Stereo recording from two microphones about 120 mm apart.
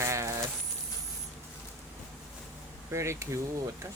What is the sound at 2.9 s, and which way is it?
Speech, 25° right (ahead or behind).